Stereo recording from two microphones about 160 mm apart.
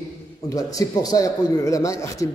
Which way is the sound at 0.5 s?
20° left (ahead or behind).